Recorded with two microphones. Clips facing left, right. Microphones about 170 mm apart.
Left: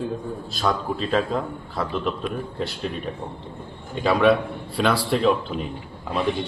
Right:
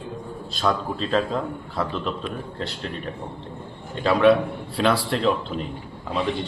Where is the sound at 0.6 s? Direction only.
5° left (ahead or behind).